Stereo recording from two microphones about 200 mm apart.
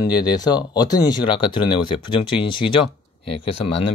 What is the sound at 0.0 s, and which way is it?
Speech, 20° left (ahead or behind).